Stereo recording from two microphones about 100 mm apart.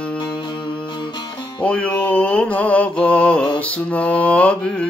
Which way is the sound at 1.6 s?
10° left (ahead or behind).